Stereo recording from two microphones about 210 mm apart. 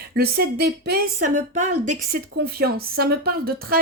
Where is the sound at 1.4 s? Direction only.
35° right (ahead or behind).